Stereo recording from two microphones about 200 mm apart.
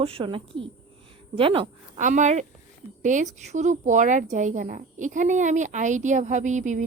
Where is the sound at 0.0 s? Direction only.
30° right (ahead or behind).